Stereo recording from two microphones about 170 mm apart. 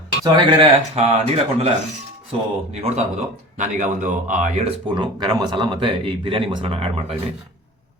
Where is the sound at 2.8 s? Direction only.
40° right (ahead or behind).